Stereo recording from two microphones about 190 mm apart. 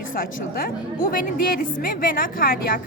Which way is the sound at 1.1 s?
50° left (ahead or behind).